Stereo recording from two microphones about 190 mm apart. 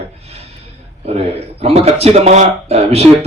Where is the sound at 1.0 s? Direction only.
30° right (ahead or behind).